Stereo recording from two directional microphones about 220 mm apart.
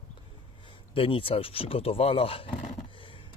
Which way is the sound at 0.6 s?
25° left (ahead or behind).